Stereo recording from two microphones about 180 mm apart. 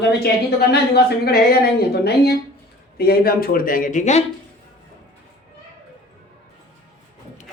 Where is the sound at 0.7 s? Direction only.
65° left (ahead or behind); by 4.2 s 40° left (ahead or behind).